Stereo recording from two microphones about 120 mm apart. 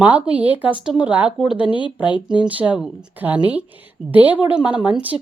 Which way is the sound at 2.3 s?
10° right (ahead or behind).